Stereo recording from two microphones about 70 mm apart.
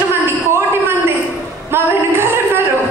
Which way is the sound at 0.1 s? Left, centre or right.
Right.